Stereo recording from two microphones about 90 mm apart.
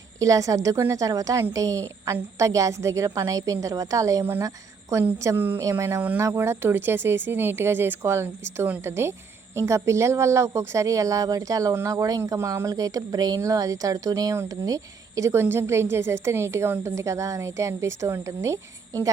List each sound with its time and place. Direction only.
0.2 s a woman's voice: 40° right (ahead or behind)